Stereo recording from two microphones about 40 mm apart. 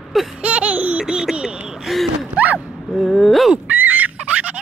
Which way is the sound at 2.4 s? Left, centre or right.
Right.